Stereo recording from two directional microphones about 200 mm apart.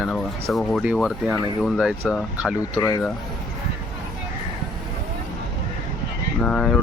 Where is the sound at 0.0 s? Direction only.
Centre (ahead or behind).